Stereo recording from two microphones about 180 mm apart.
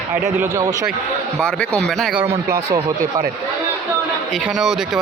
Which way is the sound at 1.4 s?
5° left (ahead or behind).